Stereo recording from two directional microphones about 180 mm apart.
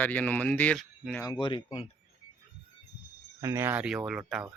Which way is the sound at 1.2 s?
25° left (ahead or behind).